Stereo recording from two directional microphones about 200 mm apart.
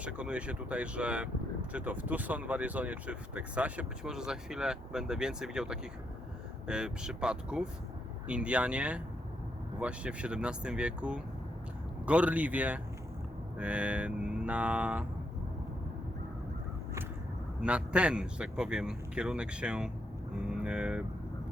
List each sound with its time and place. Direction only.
0.0 s a man's voice: 5° right (ahead or behind)
17.6 s a man's voice: 5° right (ahead or behind)